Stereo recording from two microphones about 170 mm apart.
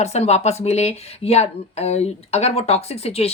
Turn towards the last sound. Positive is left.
turn(degrees=35)  # may be behind; listen again after turning